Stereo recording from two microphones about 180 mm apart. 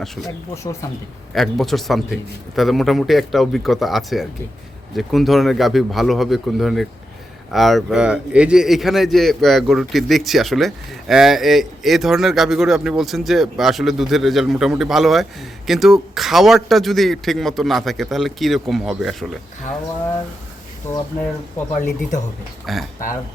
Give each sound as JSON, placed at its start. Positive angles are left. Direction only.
{"t": 0.5, "sound": "speech", "side_deg": 15}
{"t": 1.3, "sound": "a man's voice", "side_deg": 0}
{"t": 21.8, "sound": "speech", "side_deg": 45}
{"t": 22.6, "sound": "a man's voice", "side_deg": 0}